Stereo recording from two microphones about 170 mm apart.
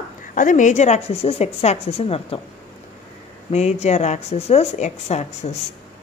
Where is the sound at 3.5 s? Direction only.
40° left (ahead or behind).